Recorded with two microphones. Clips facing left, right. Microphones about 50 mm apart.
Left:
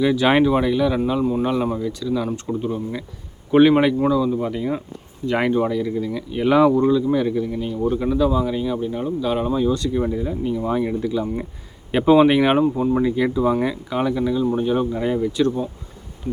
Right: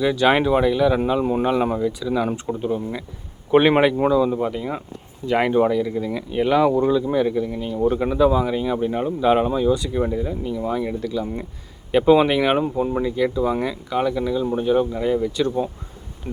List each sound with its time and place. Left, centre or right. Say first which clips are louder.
0.0 s speech: left 1 dB; centre
1.2 s speech: even; right
1.8 s speech: right 2 dB; centre
4.5 s speech: left 3 dB; centre
7.8 s speech: right 2 dB; right
8.7 s speech: right 1 dB; right
9.6 s speech: even; centre
10.7 s speech: left 2 dB; centre
12.5 s speech: left 3 dB; centre
13.0 s speech: left 2 dB; centre
16.3 s speech: left 2 dB; right